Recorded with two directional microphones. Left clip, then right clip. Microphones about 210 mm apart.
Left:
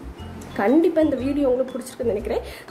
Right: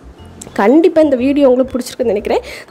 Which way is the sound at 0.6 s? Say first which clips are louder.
Right 9 dB; 45° right (ahead or behind).